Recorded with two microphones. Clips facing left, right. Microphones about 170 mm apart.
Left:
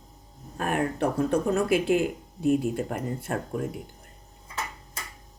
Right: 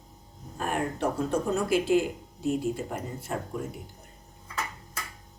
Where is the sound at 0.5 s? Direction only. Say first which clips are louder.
Left 3 dB; 60° left (ahead or behind).